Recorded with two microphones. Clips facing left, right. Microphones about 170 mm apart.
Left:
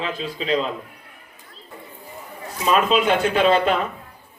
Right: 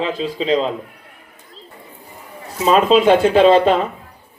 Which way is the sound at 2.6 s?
30° right (ahead or behind).